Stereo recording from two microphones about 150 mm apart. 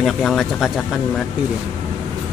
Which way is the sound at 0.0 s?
Centre (ahead or behind).